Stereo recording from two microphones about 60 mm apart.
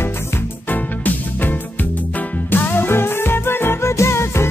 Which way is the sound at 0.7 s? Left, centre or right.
Left.